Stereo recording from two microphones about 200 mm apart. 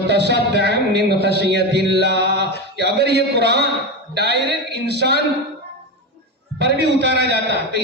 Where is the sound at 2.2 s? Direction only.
55° right (ahead or behind).